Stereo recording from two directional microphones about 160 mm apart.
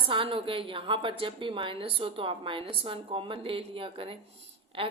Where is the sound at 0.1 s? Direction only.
35° right (ahead or behind).